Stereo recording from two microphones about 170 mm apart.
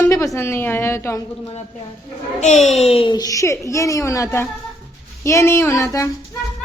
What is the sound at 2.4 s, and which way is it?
A child's voice, 40° left (ahead or behind).